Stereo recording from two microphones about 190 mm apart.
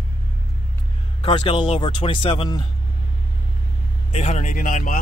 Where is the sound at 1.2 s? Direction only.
30° left (ahead or behind).